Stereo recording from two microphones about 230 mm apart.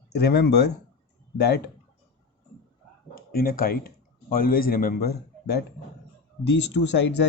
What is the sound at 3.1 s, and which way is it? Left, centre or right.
A man's voice, left.